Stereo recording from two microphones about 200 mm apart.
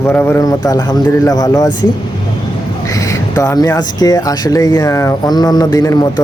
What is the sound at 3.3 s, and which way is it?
Speech, 15° left (ahead or behind).